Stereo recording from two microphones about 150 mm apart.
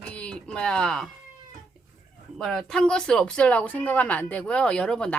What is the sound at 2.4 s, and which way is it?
Speech, 5° left (ahead or behind).